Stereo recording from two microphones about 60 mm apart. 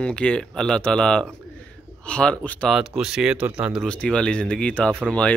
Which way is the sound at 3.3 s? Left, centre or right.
Right.